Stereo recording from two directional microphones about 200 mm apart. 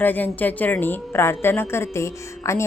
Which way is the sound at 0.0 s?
10° left (ahead or behind).